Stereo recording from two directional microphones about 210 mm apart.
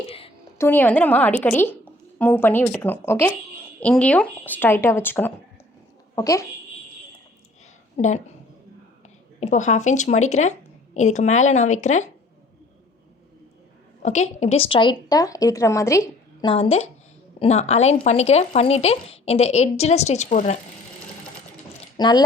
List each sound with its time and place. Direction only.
0.6 s a woman's voice: 10° left (ahead or behind)
7.9 s speech: 35° left (ahead or behind)
9.4 s speech: 35° left (ahead or behind)
14.0 s a woman's voice: 35° left (ahead or behind); by 16.5 s 15° left (ahead or behind)
16.5 s a woman's voice: 30° left (ahead or behind)
21.9 s speech: 20° left (ahead or behind)